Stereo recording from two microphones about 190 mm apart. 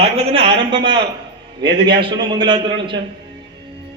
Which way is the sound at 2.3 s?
25° right (ahead or behind).